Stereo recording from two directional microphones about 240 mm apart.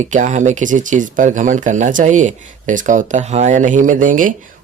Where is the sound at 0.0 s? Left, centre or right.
Right.